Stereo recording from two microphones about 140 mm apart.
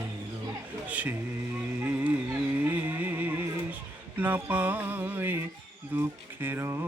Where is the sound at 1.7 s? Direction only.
10° right (ahead or behind).